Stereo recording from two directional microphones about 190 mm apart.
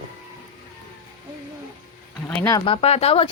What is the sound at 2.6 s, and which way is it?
Speech, 30° left (ahead or behind).